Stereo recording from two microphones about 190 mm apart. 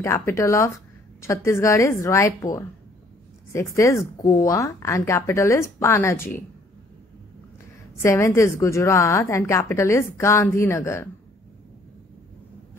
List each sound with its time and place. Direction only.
0.0 s a woman's voice: 15° left (ahead or behind)
3.7 s a woman's voice: 15° left (ahead or behind)
8.0 s a woman's voice: 15° left (ahead or behind)